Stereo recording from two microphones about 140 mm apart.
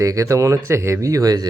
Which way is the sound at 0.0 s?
25° right (ahead or behind).